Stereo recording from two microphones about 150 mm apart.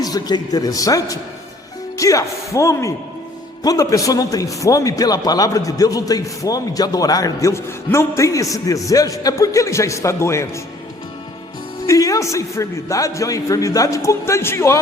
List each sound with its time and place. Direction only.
0.0 s a man's voice: 25° left (ahead or behind)
11.9 s a man's voice: 20° left (ahead or behind)